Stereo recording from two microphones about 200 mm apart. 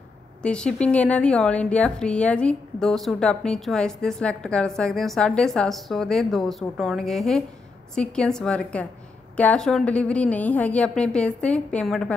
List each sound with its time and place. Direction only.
0.4 s a woman's voice: 5° left (ahead or behind)